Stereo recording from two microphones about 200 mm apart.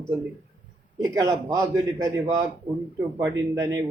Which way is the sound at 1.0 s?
15° right (ahead or behind).